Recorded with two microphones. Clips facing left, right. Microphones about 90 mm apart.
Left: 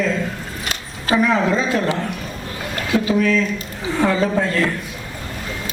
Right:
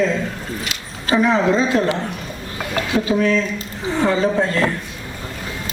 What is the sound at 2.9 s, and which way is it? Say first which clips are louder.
A man's voice: left 1 dB; 35° right (ahead or behind).